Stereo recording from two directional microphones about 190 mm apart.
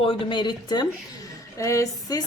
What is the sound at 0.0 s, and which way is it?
Speech, 30° left (ahead or behind).